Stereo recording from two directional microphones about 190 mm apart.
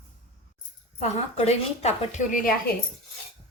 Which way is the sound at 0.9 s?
35° left (ahead or behind).